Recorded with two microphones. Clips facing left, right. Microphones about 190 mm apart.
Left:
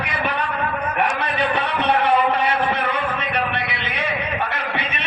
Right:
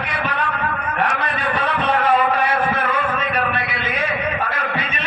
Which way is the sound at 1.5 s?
65° left (ahead or behind).